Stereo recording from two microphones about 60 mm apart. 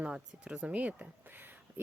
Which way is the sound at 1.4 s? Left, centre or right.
Right.